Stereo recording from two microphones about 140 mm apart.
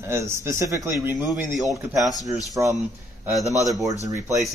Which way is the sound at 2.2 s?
25° right (ahead or behind).